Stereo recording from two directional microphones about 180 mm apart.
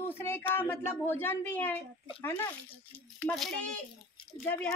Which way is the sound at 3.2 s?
5° left (ahead or behind).